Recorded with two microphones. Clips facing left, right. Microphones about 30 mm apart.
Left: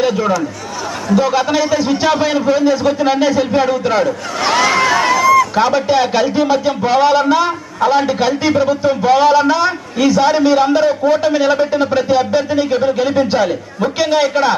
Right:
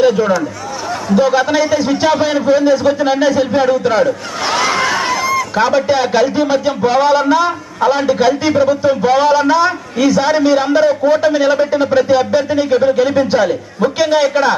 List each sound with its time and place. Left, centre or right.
0.0 s a man's voice: centre
4.4 s a sound: left
5.5 s a man's voice: centre